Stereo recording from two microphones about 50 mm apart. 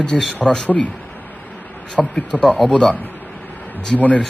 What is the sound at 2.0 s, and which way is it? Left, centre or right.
Speech, left.